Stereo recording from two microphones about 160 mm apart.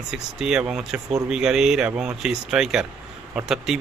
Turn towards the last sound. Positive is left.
turn(degrees=-5)  # may be behind; listen again after turning